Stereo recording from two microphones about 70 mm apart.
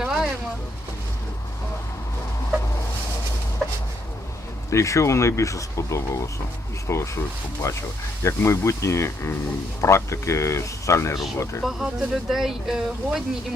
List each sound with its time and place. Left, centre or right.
0.0 s a sound: centre
4.7 s speech: left
11.6 s speech: centre